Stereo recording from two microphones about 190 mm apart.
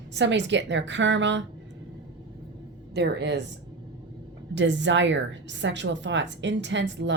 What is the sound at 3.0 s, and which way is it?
Speech, 65° right (ahead or behind).